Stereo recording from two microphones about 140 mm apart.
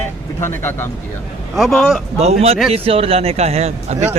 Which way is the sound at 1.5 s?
Centre (ahead or behind).